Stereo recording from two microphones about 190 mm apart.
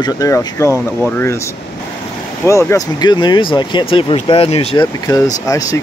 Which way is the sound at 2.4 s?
15° left (ahead or behind).